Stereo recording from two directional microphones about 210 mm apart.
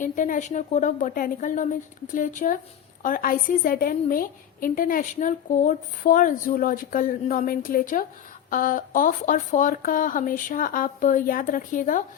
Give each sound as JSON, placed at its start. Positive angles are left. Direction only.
{"t": 0.0, "sound": "a woman's voice", "side_deg": 40}